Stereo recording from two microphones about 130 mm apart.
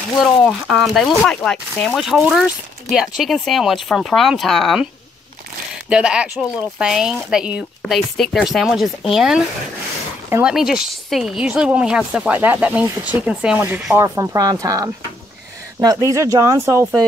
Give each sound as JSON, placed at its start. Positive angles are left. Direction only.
{"t": 0.2, "sound": "speech", "side_deg": 0}
{"t": 5.9, "sound": "speech", "side_deg": -5}
{"t": 10.4, "sound": "speech", "side_deg": -5}
{"t": 13.9, "sound": "speech", "side_deg": -25}